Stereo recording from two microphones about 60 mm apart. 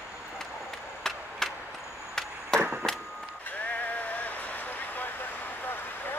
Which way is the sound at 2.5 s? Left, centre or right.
Centre.